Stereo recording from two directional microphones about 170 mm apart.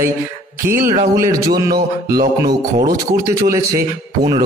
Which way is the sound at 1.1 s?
20° right (ahead or behind).